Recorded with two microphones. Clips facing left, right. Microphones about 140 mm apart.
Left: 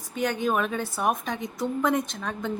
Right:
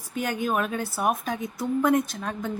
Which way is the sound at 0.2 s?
5° right (ahead or behind).